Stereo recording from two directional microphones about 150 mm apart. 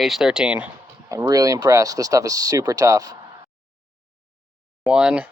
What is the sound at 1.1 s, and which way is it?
Speech, 20° right (ahead or behind).